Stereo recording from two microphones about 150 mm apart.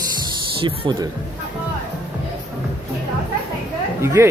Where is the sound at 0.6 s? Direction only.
35° right (ahead or behind).